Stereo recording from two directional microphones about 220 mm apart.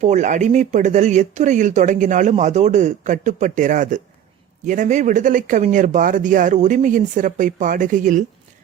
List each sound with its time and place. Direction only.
0.0 s speech: 35° right (ahead or behind)